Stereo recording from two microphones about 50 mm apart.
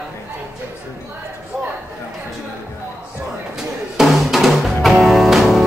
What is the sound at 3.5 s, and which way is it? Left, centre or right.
Music, centre.